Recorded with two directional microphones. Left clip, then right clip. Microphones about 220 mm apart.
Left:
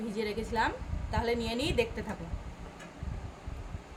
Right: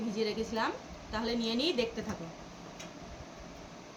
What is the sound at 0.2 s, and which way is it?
A woman's voice, 50° left (ahead or behind).